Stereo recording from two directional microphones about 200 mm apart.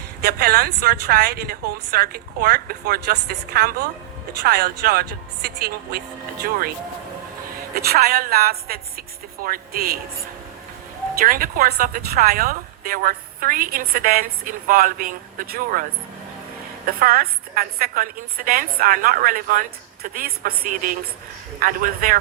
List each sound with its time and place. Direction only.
0.2 s a woman's voice: 50° right (ahead or behind)
7.8 s a woman's voice: 50° right (ahead or behind)
11.2 s a woman's voice: 45° right (ahead or behind)
17.0 s a woman's voice: 45° right (ahead or behind)